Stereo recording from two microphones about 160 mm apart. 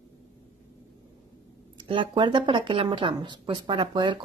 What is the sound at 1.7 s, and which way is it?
Speech, 30° right (ahead or behind).